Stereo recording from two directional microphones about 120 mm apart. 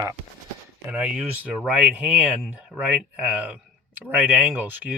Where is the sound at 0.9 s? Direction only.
10° right (ahead or behind).